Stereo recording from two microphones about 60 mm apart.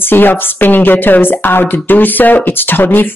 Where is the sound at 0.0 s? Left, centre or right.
Left.